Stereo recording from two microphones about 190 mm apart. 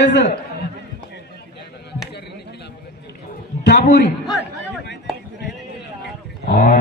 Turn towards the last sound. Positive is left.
turn(degrees=60)  # may be behind; listen again after turning